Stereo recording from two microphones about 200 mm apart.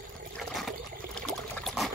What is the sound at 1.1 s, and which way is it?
Pour, 5° left (ahead or behind).